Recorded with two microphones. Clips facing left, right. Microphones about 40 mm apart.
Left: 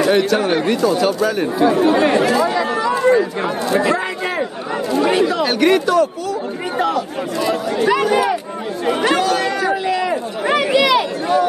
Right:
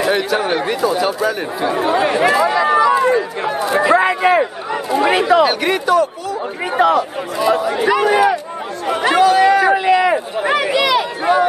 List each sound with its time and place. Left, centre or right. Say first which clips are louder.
0.0 s speech: left 2 dB; centre
2.2 s a sound: right 3 dB; centre
3.9 s speech: right 8 dB; centre
8.8 s speech: even; centre
9.1 s run: right 6 dB; centre
10.4 s a sound: left 2 dB; centre